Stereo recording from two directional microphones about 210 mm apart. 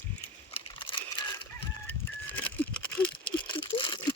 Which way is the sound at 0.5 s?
25° left (ahead or behind).